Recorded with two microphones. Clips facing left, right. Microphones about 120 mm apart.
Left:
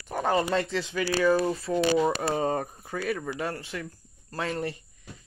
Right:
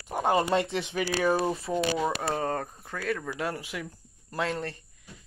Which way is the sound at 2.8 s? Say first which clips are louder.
Left 1 dB; 5° left (ahead or behind).